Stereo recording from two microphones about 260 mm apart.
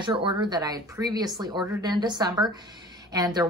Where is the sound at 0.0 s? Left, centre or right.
Centre.